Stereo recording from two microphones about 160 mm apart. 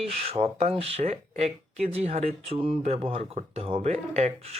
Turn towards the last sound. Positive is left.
turn(degrees=-40)  # may be behind; listen again after turning